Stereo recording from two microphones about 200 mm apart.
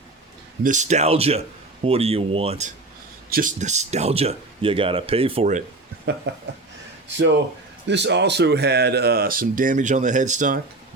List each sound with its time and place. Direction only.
0.6 s speech: 35° right (ahead or behind)
3.2 s speech: 45° right (ahead or behind)
6.3 s speech: 60° right (ahead or behind)
7.9 s speech: 60° right (ahead or behind); by 10.6 s 40° right (ahead or behind)